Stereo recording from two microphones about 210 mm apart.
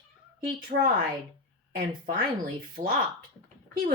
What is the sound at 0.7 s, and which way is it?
Speech, 35° right (ahead or behind).